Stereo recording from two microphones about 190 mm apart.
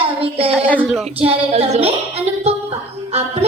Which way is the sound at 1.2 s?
30° right (ahead or behind).